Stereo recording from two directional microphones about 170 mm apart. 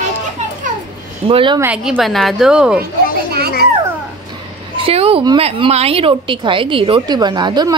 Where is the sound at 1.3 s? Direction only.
30° right (ahead or behind).